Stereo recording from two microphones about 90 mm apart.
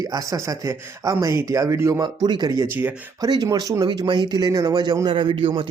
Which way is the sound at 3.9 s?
55° right (ahead or behind).